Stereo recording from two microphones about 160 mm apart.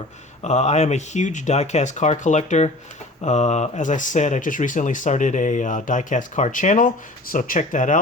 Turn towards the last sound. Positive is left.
turn(degrees=50)  # may be behind; listen again after turning